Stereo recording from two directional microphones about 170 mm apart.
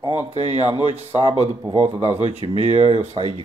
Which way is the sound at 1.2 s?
40° right (ahead or behind).